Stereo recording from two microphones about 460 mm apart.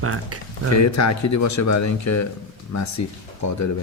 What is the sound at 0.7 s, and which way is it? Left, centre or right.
Speech, left.